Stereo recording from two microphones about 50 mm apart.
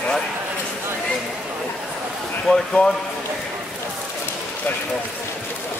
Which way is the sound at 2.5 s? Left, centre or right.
Centre.